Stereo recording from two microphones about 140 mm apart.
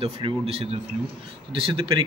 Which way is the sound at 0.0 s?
45° right (ahead or behind).